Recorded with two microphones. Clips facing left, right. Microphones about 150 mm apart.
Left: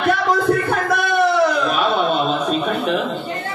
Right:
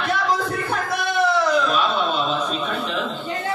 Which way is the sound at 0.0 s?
55° left (ahead or behind).